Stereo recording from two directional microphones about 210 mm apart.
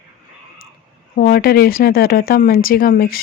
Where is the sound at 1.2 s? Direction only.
45° left (ahead or behind).